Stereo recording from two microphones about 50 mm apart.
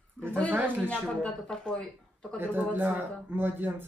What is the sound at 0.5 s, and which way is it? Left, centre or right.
Speech, right.